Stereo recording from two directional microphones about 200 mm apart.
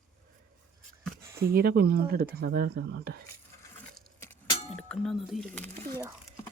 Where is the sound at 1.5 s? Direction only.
50° right (ahead or behind).